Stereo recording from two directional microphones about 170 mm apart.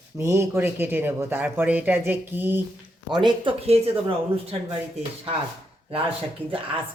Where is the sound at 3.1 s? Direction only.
25° right (ahead or behind).